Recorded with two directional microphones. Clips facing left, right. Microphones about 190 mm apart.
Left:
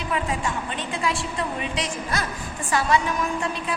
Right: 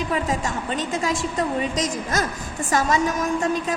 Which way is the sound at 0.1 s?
40° right (ahead or behind).